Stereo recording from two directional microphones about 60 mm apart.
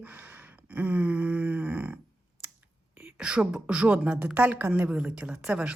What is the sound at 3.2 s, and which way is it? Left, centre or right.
Speech, centre.